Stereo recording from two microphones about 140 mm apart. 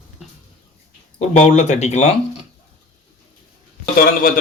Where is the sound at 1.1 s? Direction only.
55° left (ahead or behind).